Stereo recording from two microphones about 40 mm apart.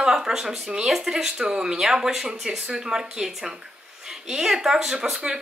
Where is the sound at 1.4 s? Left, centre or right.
Right.